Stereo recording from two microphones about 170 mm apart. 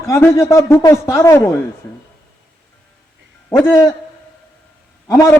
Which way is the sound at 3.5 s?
15° left (ahead or behind).